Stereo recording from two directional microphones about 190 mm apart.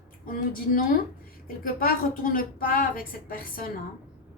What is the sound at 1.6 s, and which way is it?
A woman's voice, 45° left (ahead or behind).